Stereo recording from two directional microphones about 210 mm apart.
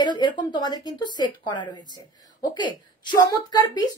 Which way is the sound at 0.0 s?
20° left (ahead or behind).